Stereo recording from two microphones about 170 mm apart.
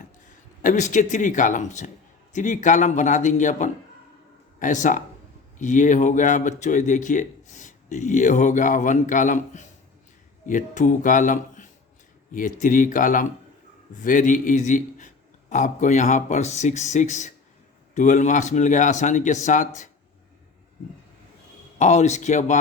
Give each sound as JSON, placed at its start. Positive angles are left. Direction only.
{"t": 0.6, "sound": "speech", "side_deg": 50}
{"t": 21.8, "sound": "speech", "side_deg": 45}